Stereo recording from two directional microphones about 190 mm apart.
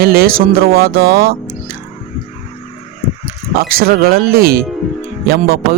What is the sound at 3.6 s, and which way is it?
Speech, 50° right (ahead or behind).